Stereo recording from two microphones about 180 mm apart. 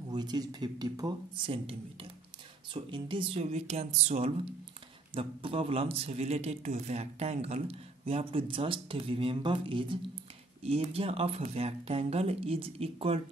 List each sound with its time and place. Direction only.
0.1 s speech: 25° right (ahead or behind)